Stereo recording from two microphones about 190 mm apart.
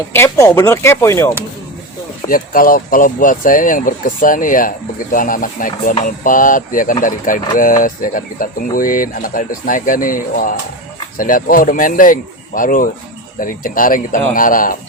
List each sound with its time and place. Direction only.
0.1 s speech: 15° left (ahead or behind)
2.3 s speech: 45° left (ahead or behind)